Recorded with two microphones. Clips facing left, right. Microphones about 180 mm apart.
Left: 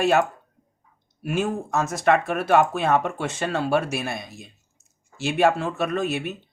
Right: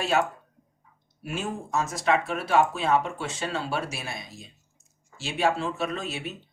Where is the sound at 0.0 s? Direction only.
55° left (ahead or behind).